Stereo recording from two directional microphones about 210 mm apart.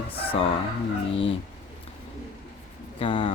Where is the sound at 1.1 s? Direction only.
25° left (ahead or behind).